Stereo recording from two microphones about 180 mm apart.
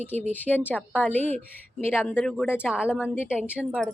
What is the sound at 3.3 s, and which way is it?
Speech, 5° right (ahead or behind).